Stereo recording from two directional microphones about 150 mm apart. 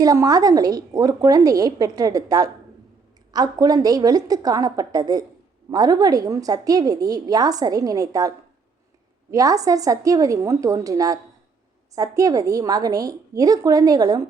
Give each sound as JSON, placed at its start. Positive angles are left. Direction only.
{"t": 0.0, "sound": "a woman's voice", "side_deg": -25}
{"t": 9.3, "sound": "a woman's voice", "side_deg": -20}